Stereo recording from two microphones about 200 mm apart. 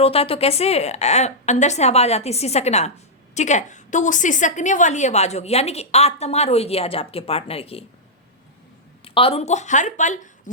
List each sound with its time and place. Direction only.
0.0 s a woman's voice: 30° left (ahead or behind)
9.0 s speech: 25° left (ahead or behind)